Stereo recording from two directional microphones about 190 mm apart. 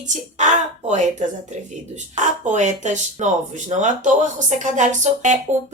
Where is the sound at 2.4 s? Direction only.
40° right (ahead or behind).